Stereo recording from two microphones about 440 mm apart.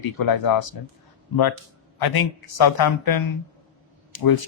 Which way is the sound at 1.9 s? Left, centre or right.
Left.